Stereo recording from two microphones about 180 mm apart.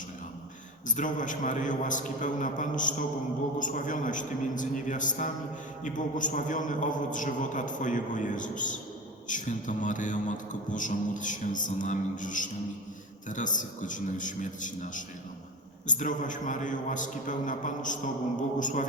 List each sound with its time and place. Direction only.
0.9 s a man's voice: 45° left (ahead or behind)